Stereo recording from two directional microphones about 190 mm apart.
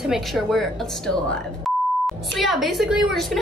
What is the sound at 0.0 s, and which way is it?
Speech, centre (ahead or behind).